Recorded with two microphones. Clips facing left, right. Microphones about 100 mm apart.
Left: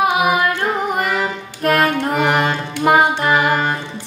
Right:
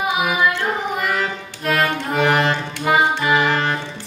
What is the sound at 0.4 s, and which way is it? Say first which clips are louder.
Carnatic music: left 1 dB; 50° left (ahead or behind).